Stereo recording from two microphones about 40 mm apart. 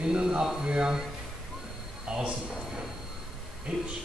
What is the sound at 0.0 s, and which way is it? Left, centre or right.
Speech, centre.